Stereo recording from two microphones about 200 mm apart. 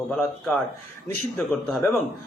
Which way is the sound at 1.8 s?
10° left (ahead or behind).